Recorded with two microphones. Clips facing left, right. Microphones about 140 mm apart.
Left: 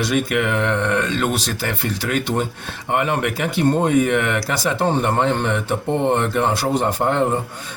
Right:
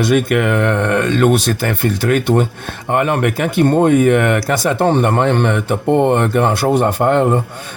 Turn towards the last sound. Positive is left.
turn(degrees=-60)  # may be behind; listen again after turning